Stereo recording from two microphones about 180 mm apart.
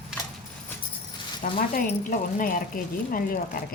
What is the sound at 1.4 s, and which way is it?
Speech, 45° left (ahead or behind).